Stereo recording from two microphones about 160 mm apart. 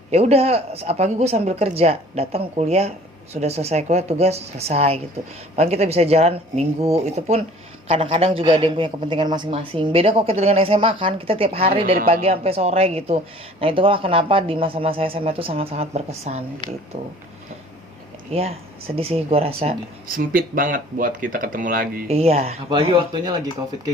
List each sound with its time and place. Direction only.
0.1 s a man's voice: 40° right (ahead or behind)
18.3 s a man's voice: 40° right (ahead or behind)
20.1 s speech: 60° right (ahead or behind)
22.0 s a man's voice: 40° right (ahead or behind)